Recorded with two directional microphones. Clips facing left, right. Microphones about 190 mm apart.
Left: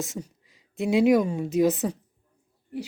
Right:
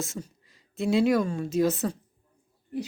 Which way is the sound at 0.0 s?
15° left (ahead or behind).